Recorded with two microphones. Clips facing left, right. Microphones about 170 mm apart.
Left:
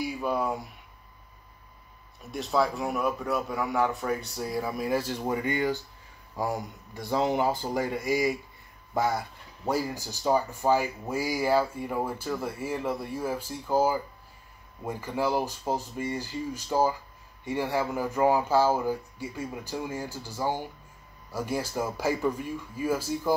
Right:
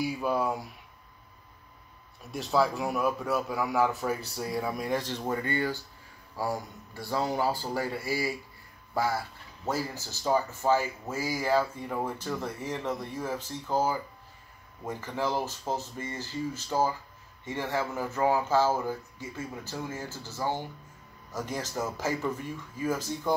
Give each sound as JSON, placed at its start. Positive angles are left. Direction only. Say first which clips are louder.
{"t": 0.0, "sound": "a man's voice", "louder": "even", "side_deg": 0}
{"t": 2.3, "sound": "a man's voice", "louder": "even", "side_deg": 0}